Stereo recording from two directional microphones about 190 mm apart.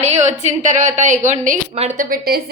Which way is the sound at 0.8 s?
40° right (ahead or behind).